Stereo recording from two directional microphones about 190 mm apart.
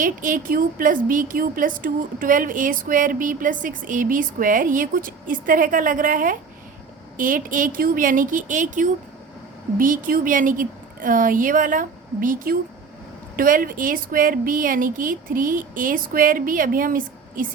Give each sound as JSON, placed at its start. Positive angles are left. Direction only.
{"t": 0.0, "sound": "speech", "side_deg": -45}